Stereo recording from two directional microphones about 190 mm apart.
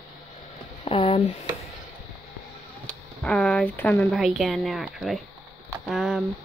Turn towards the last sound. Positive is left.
turn(degrees=0)  # may be behind; listen again after turning